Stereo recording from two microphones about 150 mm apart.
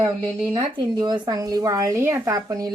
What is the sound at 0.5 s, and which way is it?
Speech, 30° right (ahead or behind).